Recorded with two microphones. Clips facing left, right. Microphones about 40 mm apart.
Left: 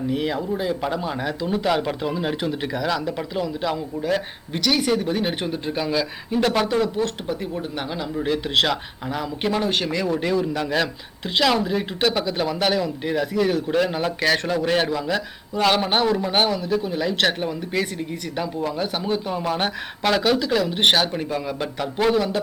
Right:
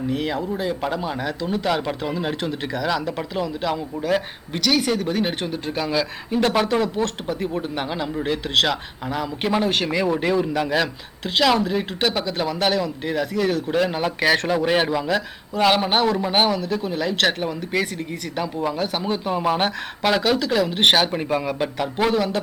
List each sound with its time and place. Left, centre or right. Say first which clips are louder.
0.1 s speech: left 1 dB; centre
8.2 s speech: even; centre